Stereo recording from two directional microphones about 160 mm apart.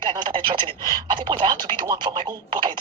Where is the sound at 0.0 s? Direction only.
30° right (ahead or behind).